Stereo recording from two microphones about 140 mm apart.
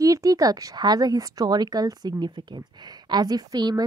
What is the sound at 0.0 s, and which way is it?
A woman's voice, 25° right (ahead or behind).